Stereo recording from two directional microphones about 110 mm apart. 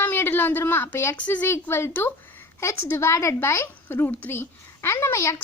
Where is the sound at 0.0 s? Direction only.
20° left (ahead or behind).